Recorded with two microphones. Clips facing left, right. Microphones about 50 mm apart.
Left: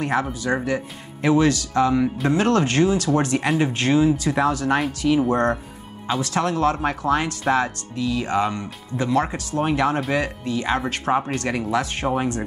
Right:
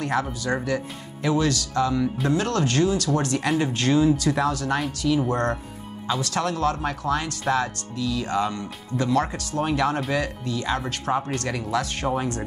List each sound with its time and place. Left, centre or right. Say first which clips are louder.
0.0 s speech: left 2 dB; centre